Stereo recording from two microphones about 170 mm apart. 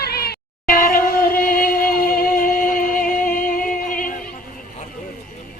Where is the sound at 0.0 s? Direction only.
65° left (ahead or behind).